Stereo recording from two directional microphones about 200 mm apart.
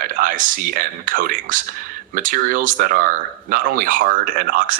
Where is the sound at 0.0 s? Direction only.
45° right (ahead or behind).